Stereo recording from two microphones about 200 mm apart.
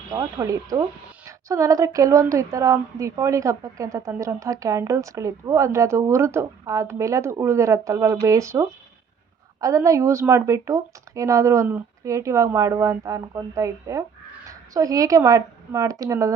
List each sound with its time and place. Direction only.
0.1 s a woman's voice: 15° right (ahead or behind)